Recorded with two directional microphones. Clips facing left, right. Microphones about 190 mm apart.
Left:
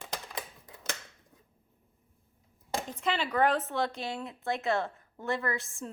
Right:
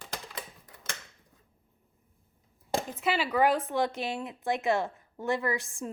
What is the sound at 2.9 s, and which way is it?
Speech, 5° right (ahead or behind).